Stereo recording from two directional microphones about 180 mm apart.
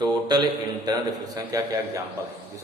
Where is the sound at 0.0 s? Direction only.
25° right (ahead or behind).